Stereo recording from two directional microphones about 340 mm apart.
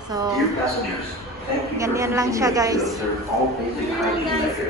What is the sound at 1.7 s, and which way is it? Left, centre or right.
A woman's voice, centre.